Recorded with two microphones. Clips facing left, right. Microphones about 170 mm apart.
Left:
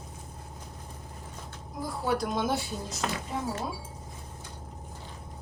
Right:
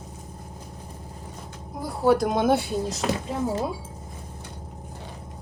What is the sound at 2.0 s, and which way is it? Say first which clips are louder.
Speech: right 9 dB; 45° right (ahead or behind).